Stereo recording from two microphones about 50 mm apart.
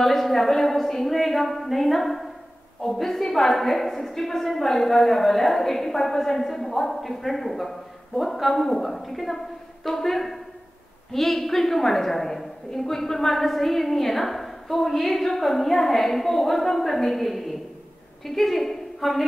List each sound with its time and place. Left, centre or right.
0.0 s a woman's voice: centre